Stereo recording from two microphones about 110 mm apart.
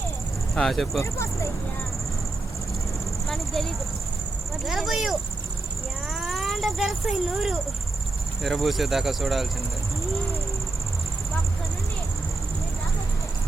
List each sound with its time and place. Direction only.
0.5 s speech: 5° left (ahead or behind)
0.9 s speech: 25° left (ahead or behind)
3.2 s a sound: centre (ahead or behind)
4.6 s speech: centre (ahead or behind)